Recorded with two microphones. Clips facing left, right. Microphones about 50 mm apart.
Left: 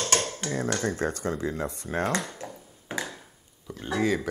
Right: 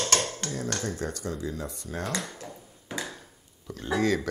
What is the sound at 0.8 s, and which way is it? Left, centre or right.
Speech, left.